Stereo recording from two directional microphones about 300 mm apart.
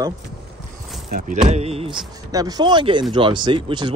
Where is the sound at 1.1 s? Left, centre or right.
Right.